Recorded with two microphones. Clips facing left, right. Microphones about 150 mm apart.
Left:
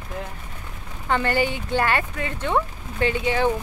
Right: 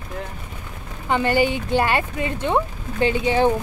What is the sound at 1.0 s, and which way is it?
Speech, 15° right (ahead or behind).